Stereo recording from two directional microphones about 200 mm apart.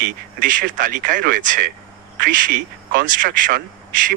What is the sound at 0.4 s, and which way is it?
A man's voice, 45° right (ahead or behind).